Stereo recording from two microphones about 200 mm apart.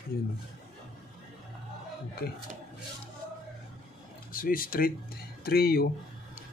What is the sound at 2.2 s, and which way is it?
Speech, 50° left (ahead or behind).